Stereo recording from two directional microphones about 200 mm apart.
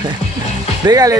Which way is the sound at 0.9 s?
20° right (ahead or behind).